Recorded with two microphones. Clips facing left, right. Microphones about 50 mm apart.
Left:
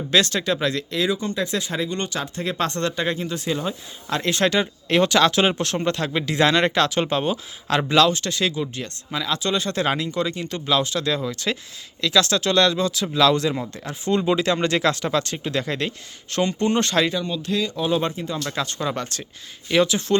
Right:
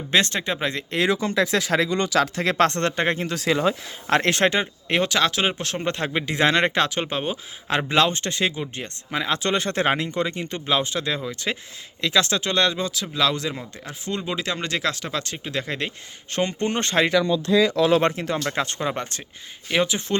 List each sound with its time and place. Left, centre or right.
0.1 s speech: right
1.0 s speech: right
3.3 s speech: right
4.1 s speech: right
4.6 s speech: centre
5.8 s speech: right
12.9 s speech: centre
16.3 s speech: right
17.7 s speech: right
18.3 s speech: right
18.9 s speech: right